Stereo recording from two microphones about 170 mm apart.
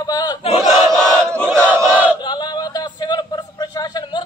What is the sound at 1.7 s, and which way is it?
Battle cry, 10° right (ahead or behind).